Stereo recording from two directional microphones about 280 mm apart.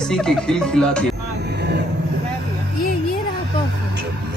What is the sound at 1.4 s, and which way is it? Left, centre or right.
Vehicle, right.